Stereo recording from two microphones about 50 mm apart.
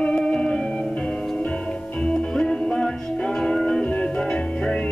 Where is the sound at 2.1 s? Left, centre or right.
Centre.